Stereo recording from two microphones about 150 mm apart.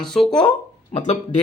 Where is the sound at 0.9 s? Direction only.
50° left (ahead or behind).